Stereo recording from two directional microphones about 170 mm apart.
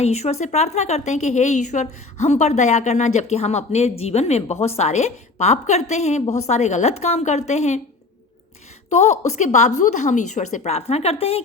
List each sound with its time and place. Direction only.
0.0 s a woman's voice: 40° left (ahead or behind)
8.9 s a woman's voice: 40° left (ahead or behind)